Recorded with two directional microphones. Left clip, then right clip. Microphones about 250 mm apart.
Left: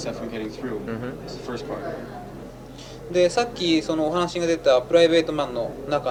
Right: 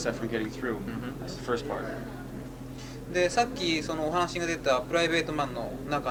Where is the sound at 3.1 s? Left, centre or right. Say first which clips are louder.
Left 6 dB; centre.